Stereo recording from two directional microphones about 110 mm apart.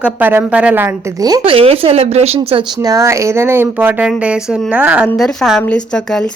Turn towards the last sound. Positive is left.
turn(degrees=0)  # may be behind; listen again after turning